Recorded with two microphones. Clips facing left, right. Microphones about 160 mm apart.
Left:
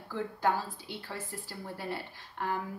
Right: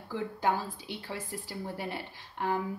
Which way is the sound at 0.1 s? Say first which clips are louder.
Even; 15° right (ahead or behind).